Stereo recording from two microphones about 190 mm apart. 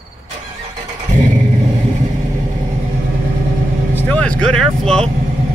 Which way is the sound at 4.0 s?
5° left (ahead or behind).